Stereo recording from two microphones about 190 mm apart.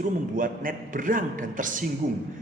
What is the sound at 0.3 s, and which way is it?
A man's voice, 45° right (ahead or behind).